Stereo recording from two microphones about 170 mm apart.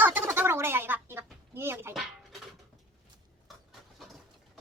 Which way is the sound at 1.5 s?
15° right (ahead or behind).